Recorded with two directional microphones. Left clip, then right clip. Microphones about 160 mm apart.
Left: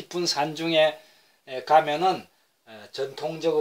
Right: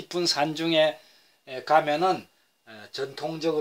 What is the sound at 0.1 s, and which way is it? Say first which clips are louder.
Speech: right 1 dB; 30° right (ahead or behind).